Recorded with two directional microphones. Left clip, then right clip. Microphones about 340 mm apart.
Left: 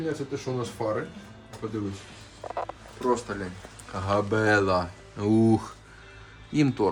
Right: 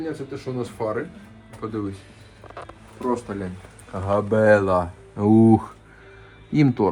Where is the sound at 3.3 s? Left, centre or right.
Right.